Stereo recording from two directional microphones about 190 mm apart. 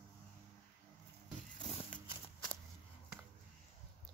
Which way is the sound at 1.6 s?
35° left (ahead or behind).